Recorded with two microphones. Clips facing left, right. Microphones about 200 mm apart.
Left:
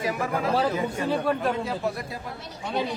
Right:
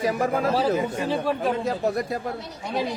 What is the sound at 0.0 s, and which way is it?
Speech, 40° right (ahead or behind).